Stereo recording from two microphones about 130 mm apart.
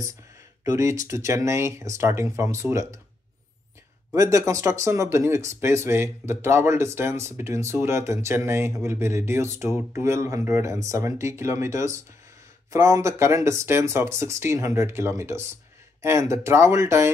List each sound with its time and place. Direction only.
0.7 s speech: 25° right (ahead or behind)
4.1 s speech: 25° right (ahead or behind)